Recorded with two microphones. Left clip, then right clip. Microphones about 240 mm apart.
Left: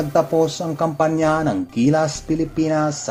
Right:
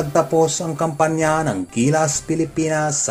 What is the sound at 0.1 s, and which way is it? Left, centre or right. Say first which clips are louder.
Speech: right 1 dB; right.